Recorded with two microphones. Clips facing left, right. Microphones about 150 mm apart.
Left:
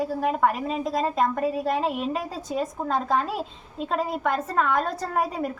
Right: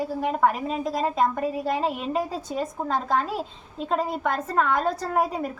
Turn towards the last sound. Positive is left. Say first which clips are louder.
# right 1 dB
turn(degrees=0)  # may be behind; listen again after turning